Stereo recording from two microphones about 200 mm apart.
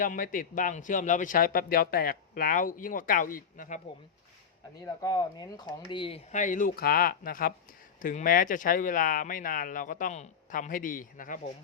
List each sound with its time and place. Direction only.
0.0 s speech: 40° left (ahead or behind)
4.8 s speech: 15° left (ahead or behind); by 11.3 s 40° left (ahead or behind)